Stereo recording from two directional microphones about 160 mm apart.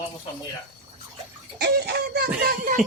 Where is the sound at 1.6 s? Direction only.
85° right.